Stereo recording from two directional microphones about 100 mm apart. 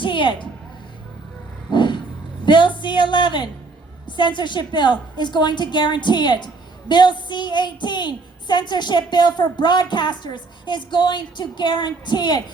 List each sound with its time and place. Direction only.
0.0 s a sound: 55° left (ahead or behind)
1.7 s vehicle: 50° left (ahead or behind)
2.4 s a woman's voice: 50° left (ahead or behind)